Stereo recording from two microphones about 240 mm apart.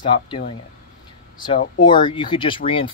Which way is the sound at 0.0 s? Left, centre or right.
Centre.